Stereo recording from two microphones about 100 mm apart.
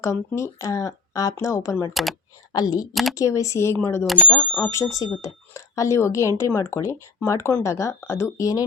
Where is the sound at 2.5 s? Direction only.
45° left (ahead or behind).